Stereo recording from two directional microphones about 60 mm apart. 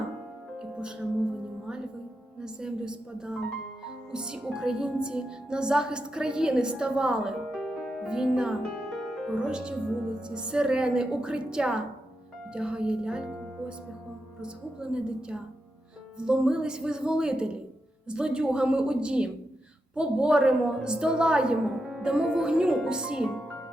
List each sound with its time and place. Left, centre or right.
0.6 s music: centre
2.4 s music: centre
7.5 s music: centre
9.0 s music: centre
9.3 s music: centre
12.5 s speech: centre
14.4 s music: centre
21.8 s speech: centre
22.9 s music: centre